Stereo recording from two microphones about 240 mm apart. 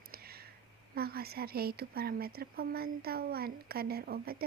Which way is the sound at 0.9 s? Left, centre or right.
Right.